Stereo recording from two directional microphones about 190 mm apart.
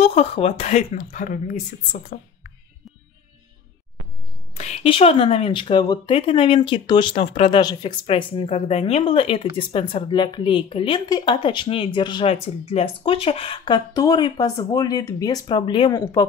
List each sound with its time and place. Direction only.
0.0 s speech: 30° left (ahead or behind)
4.6 s speech: 30° left (ahead or behind)